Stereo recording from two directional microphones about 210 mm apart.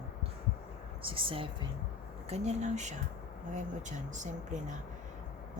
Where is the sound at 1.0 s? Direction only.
25° right (ahead or behind).